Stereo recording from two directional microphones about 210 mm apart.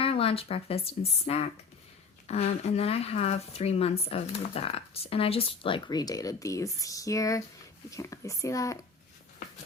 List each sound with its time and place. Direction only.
0.0 s speech: 25° left (ahead or behind)